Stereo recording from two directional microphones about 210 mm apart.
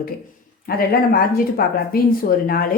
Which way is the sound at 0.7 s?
45° left (ahead or behind).